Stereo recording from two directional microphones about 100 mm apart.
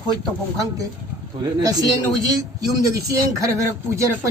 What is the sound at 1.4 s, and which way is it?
Speech, 40° right (ahead or behind).